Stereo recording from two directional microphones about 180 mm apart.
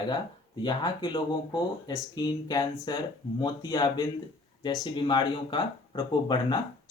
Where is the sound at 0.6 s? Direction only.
25° left (ahead or behind).